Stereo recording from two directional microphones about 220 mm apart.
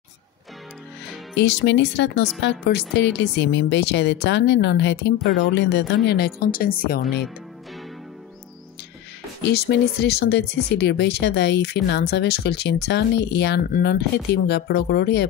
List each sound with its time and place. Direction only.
1.3 s speech: 55° left (ahead or behind)
9.5 s speech: 50° left (ahead or behind)